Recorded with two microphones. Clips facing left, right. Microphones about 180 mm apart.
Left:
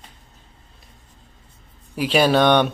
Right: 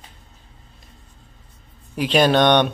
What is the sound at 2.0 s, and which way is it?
Speech, 5° left (ahead or behind).